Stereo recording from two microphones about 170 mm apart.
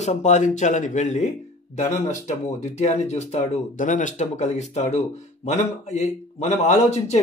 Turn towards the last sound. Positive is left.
turn(degrees=40)  # may be behind; listen again after turning